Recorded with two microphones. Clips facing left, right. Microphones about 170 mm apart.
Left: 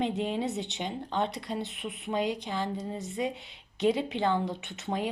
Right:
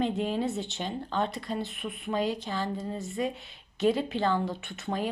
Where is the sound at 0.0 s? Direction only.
20° left (ahead or behind).